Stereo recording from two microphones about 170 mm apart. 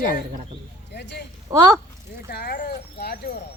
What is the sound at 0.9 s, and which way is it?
Speech, 80° left.